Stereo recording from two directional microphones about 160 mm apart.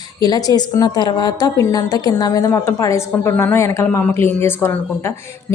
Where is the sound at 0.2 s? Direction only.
25° left (ahead or behind).